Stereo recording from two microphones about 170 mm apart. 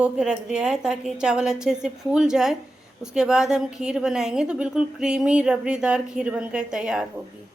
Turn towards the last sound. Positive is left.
turn(degrees=-5)  # may be behind; listen again after turning